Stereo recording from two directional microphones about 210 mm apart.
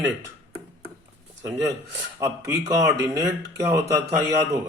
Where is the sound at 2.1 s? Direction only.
15° right (ahead or behind).